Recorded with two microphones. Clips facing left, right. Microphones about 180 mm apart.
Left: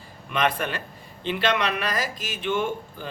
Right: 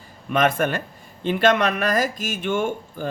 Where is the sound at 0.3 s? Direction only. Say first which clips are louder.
Right 5 dB; 45° right (ahead or behind).